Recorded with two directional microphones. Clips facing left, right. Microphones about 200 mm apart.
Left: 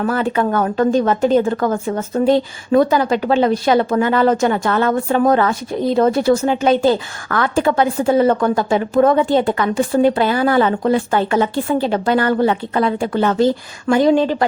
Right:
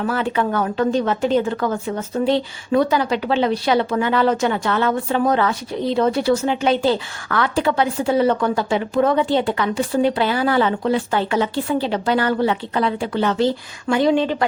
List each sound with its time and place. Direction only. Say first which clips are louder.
0.0 s a woman's voice: left 3 dB; 45° left (ahead or behind)